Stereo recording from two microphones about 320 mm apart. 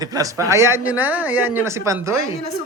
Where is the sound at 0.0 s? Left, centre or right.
Centre.